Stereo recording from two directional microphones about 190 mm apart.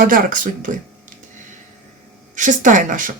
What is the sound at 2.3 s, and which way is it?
Speech, 40° right (ahead or behind).